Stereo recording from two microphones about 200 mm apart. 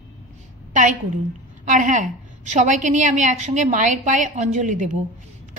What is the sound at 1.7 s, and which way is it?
A woman's voice, 40° right (ahead or behind).